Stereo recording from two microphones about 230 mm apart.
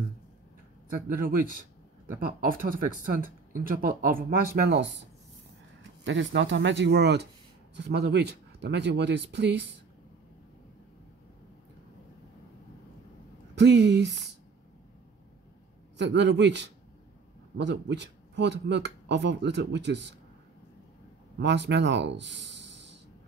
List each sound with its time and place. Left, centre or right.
1.0 s speech: right
6.0 s speech: right
13.6 s speech: right
16.0 s speech: right
21.4 s speech: right